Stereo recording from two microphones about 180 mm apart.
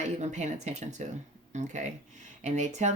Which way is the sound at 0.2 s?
40° right (ahead or behind).